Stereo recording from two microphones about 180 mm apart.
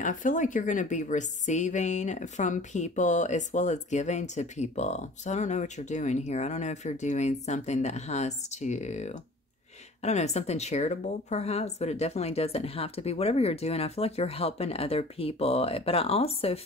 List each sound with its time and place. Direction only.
0.0 s a woman's voice: 45° left (ahead or behind)